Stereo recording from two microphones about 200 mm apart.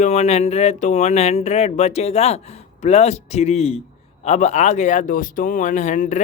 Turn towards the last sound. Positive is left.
turn(degrees=40)  # may be behind; listen again after turning